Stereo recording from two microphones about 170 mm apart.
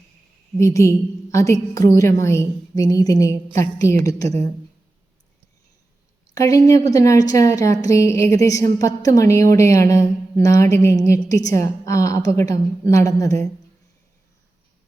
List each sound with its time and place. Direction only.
0.6 s a woman's voice: 15° left (ahead or behind)
6.3 s a woman's voice: 20° left (ahead or behind)